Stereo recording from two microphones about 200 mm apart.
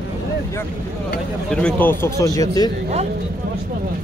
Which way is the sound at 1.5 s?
5° left (ahead or behind).